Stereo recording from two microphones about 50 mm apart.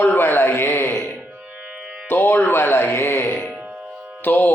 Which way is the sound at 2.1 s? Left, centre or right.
Left.